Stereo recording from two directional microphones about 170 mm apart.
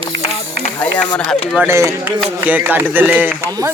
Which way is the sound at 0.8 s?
10° left (ahead or behind).